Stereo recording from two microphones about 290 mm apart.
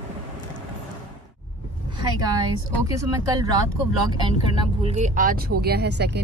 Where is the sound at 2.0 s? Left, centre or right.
Centre.